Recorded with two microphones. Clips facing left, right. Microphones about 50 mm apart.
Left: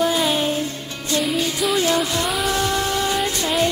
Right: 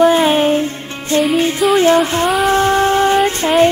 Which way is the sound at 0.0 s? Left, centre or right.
Right.